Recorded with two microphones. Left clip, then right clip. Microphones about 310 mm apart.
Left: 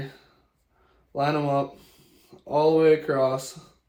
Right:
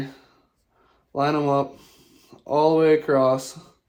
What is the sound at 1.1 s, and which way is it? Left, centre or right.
Speech, right.